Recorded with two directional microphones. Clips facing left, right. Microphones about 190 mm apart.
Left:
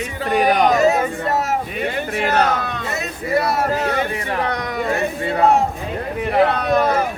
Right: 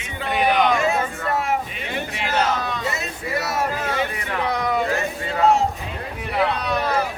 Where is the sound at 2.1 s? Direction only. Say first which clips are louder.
Left 4 dB; 55° left (ahead or behind).